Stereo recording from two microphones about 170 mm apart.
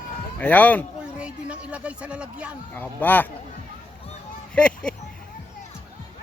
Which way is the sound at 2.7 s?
10° left (ahead or behind).